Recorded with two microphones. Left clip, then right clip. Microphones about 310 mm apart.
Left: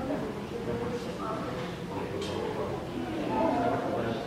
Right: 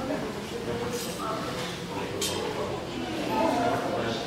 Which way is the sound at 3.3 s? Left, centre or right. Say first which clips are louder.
Right 2 dB; centre.